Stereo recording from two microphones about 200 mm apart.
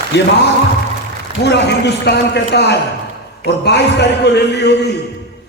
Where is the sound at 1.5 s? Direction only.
60° left (ahead or behind).